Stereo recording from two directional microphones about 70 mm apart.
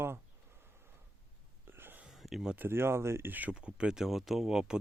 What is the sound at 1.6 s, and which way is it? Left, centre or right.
Whispering, right.